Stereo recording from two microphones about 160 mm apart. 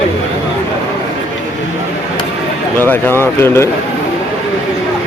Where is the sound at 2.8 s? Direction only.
15° left (ahead or behind).